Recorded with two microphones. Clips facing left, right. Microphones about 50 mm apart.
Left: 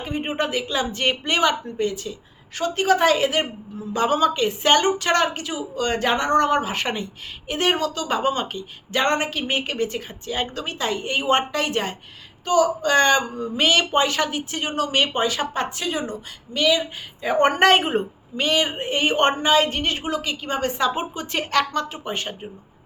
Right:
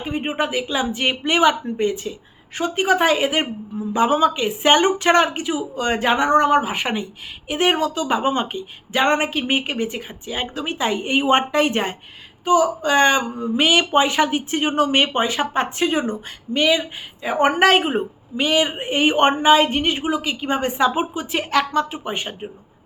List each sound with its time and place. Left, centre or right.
0.0 s a woman's voice: centre
17.2 s a woman's voice: centre